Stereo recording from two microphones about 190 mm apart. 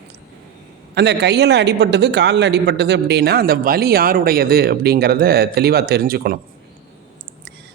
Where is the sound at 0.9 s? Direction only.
60° right (ahead or behind).